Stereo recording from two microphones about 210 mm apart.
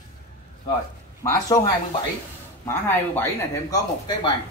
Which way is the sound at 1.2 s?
15° left (ahead or behind).